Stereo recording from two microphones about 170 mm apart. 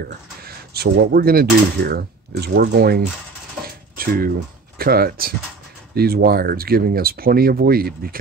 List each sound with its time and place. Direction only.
0.0 s speech: 65° right (ahead or behind)
3.6 s dishes: 60° right (ahead or behind)
4.7 s speech: 65° right (ahead or behind)